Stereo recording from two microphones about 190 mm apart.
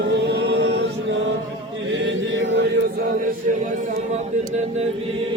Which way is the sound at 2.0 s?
75° right (ahead or behind).